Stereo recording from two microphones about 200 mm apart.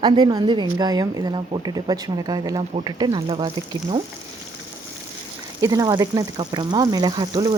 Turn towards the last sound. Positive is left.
turn(degrees=-20)  # may be behind; listen again after turning